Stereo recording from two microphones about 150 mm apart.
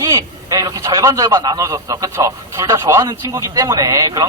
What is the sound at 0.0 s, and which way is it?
A man's voice, 25° right (ahead or behind).